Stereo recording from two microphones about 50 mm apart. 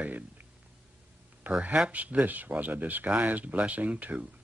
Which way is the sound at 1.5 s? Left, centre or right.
Right.